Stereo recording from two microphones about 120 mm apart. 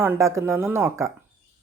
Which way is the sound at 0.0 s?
20° right (ahead or behind).